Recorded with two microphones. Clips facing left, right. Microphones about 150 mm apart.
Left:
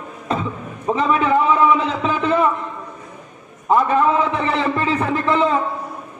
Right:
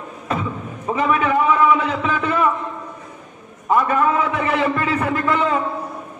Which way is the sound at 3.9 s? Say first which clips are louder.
Left 2 dB; 30° left (ahead or behind).